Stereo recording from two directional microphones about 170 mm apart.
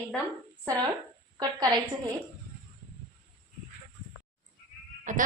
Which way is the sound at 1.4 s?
25° right (ahead or behind).